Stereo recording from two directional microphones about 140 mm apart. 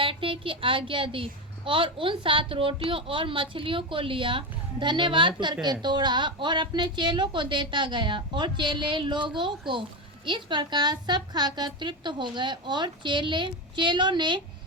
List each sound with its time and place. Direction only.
0.0 s a woman's voice: 40° right (ahead or behind)